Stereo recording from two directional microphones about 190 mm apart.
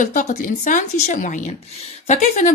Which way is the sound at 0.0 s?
40° left (ahead or behind).